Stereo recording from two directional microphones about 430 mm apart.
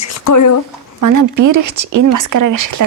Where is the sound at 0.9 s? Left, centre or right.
Right.